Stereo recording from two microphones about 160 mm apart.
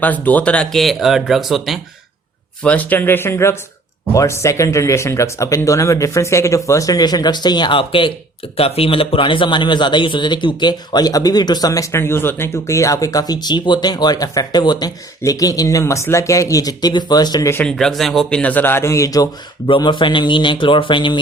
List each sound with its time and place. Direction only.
0.0 s speech: 10° left (ahead or behind)
2.6 s speech: 10° left (ahead or behind); by 17.5 s 25° left (ahead or behind)
17.5 s speech: 5° left (ahead or behind); by 21.2 s 30° left (ahead or behind)